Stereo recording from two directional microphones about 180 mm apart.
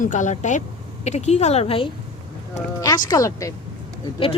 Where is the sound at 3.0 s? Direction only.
20° left (ahead or behind).